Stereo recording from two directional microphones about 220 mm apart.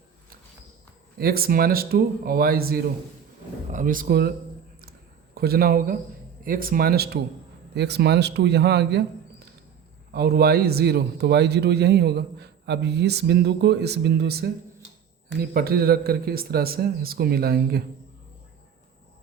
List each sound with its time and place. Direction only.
1.2 s a man's voice: 45° right (ahead or behind)
4.8 s a sound: 45° right (ahead or behind)
6.4 s a man's voice: 40° right (ahead or behind)
10.1 s a man's voice: 45° right (ahead or behind)